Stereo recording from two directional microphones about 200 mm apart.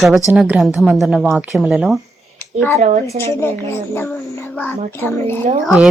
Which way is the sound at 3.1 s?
15° left (ahead or behind).